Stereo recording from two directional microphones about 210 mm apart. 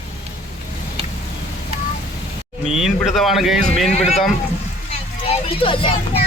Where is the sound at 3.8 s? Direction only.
30° left (ahead or behind).